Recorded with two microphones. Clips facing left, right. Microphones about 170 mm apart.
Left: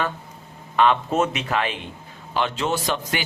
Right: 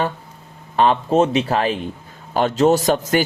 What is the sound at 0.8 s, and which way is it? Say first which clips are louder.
A man's voice: right 4 dB; 35° right (ahead or behind).